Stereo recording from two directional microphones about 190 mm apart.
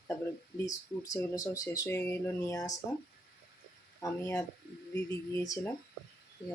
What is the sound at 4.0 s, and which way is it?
Speech, 15° left (ahead or behind).